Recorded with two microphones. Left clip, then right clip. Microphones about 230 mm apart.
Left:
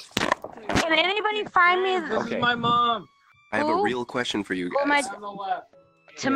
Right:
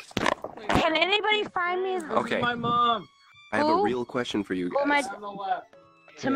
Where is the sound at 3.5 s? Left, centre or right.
Centre.